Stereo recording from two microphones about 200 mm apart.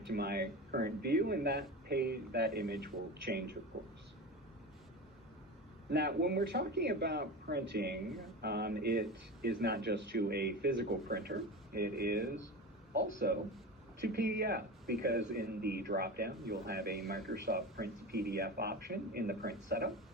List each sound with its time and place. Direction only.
0.1 s speech: 50° right (ahead or behind)
5.9 s speech: 55° right (ahead or behind)